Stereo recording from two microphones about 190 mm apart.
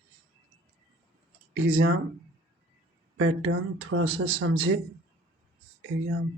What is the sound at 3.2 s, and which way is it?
Speech, 90° right.